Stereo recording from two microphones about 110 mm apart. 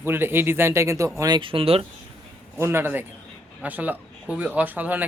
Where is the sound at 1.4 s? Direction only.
55° right (ahead or behind).